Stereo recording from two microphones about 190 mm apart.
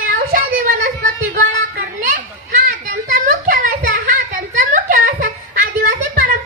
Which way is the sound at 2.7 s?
45° right (ahead or behind).